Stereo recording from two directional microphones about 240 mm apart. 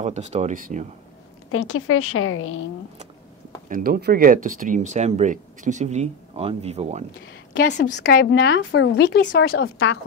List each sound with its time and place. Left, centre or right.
0.0 s speech: right
1.5 s a woman's voice: left
3.6 s speech: right
7.5 s speech: left